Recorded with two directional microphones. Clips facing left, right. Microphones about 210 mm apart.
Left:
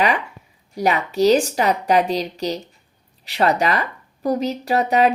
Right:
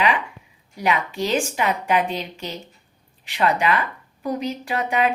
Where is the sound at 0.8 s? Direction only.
40° left (ahead or behind).